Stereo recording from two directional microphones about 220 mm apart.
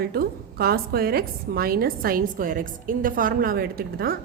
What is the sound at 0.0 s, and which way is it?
A woman's voice, 45° right (ahead or behind).